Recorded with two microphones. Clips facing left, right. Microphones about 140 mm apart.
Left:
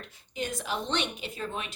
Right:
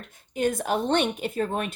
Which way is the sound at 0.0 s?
50° right (ahead or behind).